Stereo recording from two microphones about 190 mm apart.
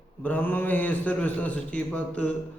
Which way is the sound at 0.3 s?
10° left (ahead or behind).